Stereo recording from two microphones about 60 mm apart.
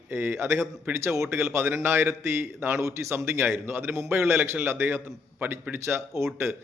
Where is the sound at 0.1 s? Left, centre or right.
Right.